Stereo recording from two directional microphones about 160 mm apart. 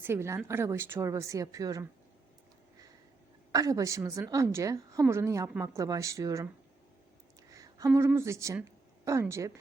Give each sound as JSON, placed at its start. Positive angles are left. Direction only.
{"t": 0.0, "sound": "a woman's voice", "side_deg": -15}
{"t": 3.5, "sound": "a woman's voice", "side_deg": -20}
{"t": 7.5, "sound": "speech", "side_deg": -20}
{"t": 8.6, "sound": "a sound", "side_deg": -20}